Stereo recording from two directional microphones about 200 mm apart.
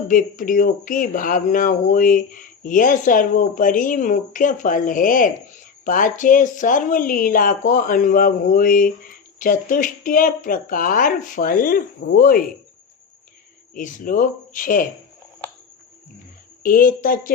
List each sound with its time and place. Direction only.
0.1 s speech: 40° left (ahead or behind)
13.7 s speech: 45° left (ahead or behind)
16.6 s speech: 45° left (ahead or behind)